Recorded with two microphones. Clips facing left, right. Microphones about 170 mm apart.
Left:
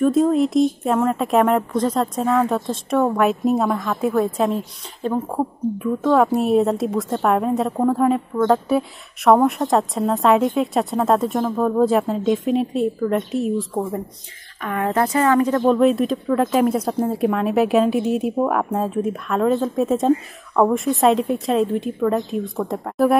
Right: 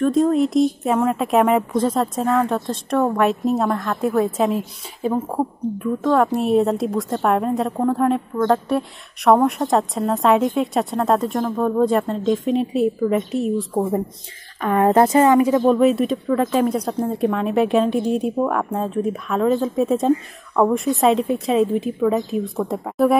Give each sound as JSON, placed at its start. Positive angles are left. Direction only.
{"t": 0.0, "sound": "speech", "side_deg": 0}
{"t": 14.6, "sound": "a woman's voice", "side_deg": -35}
{"t": 15.2, "sound": "speech", "side_deg": -10}